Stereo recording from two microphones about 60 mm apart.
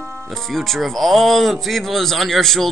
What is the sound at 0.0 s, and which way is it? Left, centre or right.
Music, right.